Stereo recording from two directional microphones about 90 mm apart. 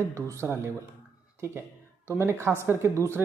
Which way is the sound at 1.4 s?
30° right (ahead or behind).